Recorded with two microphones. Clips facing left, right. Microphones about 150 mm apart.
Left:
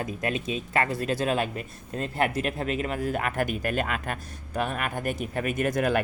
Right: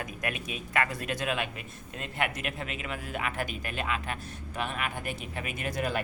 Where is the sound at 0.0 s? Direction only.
30° left (ahead or behind).